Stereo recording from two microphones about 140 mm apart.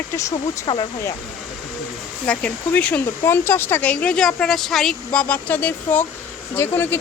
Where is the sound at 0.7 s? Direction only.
35° left (ahead or behind).